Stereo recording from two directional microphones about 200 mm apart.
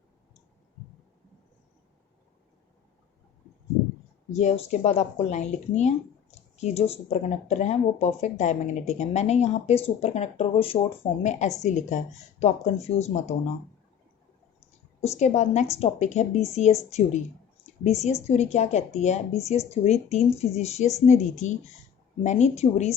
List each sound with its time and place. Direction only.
4.3 s speech: 35° left (ahead or behind)
15.0 s speech: 35° left (ahead or behind)
17.8 s speech: 35° left (ahead or behind)